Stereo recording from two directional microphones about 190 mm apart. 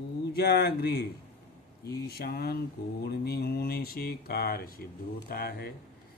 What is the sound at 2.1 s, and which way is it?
Speech, 55° left (ahead or behind).